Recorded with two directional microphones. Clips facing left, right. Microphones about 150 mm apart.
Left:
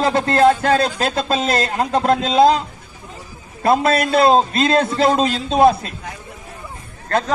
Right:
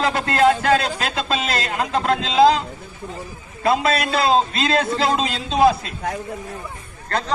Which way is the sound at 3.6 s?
50° left (ahead or behind).